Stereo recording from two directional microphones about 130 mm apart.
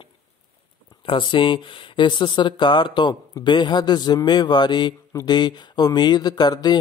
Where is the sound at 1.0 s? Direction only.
40° left (ahead or behind).